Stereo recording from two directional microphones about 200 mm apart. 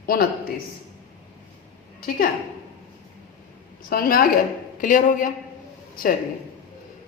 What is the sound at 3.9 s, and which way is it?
A woman's voice, 45° left (ahead or behind).